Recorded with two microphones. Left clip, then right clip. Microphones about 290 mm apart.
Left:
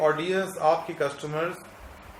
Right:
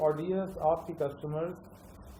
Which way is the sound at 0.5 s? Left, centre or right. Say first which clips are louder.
Left 6 dB; left.